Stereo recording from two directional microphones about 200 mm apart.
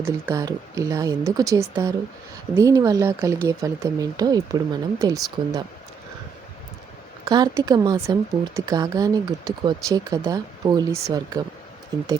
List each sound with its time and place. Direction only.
0.0 s speech: 15° right (ahead or behind)
7.3 s speech: 20° right (ahead or behind)